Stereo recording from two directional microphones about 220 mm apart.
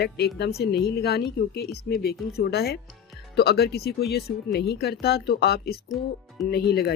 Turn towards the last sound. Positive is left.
turn(degrees=45)  # may be behind; listen again after turning